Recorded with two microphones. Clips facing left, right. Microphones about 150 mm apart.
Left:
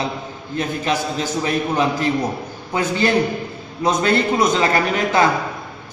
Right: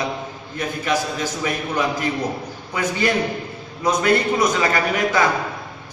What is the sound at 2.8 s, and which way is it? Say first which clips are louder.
A man's voice: left 3 dB; 30° left (ahead or behind).